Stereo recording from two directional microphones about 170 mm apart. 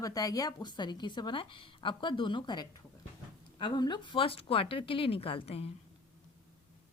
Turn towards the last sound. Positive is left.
turn(degrees=35)  # may be behind; listen again after turning